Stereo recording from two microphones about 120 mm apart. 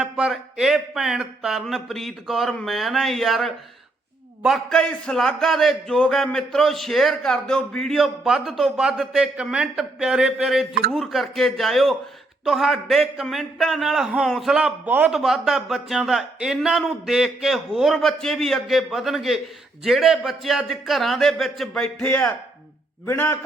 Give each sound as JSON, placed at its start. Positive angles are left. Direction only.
{"t": 0.0, "sound": "a man's voice", "side_deg": -5}
{"t": 14.8, "sound": "a man's voice", "side_deg": -15}
{"t": 15.1, "sound": "a man's voice", "side_deg": -5}